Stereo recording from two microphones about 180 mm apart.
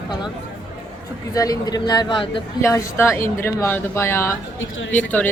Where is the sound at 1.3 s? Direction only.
20° left (ahead or behind).